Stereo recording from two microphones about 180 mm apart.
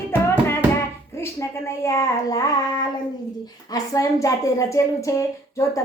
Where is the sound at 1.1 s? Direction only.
15° left (ahead or behind).